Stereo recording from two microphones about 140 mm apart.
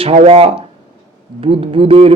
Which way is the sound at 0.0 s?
50° right (ahead or behind).